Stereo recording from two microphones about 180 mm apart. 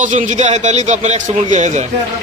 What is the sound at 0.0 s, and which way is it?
A man's voice, 45° right (ahead or behind).